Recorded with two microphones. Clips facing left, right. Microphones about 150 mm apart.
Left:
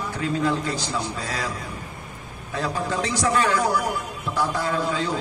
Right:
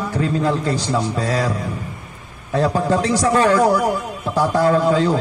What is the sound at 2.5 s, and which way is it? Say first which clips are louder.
A man's voice: right 9 dB; 40° right (ahead or behind).